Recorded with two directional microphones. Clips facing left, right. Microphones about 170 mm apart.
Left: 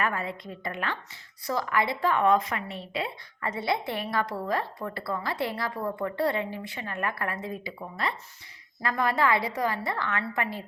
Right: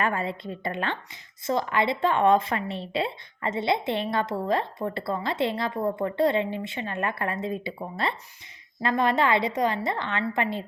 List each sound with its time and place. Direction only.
0.0 s a woman's voice: 25° right (ahead or behind)